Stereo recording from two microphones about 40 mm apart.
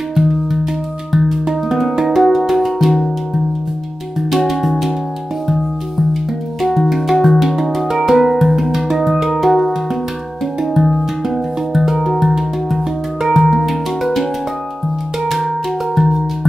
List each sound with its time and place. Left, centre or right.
0.1 s music: centre
4.3 s music: centre
6.6 s music: centre
15.2 s music: centre